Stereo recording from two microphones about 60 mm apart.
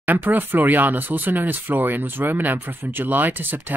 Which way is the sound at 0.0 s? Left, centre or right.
Right.